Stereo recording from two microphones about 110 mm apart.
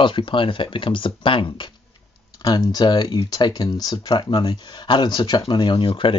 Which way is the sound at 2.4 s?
40° left (ahead or behind).